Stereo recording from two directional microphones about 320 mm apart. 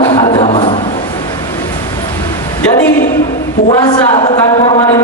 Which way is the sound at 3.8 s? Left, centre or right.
Centre.